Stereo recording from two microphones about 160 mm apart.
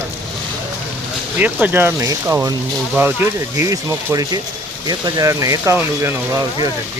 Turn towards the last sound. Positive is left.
turn(degrees=-20)  # may be behind; listen again after turning